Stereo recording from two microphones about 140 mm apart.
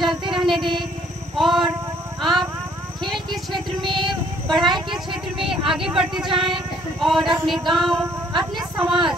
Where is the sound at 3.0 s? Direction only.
Centre (ahead or behind).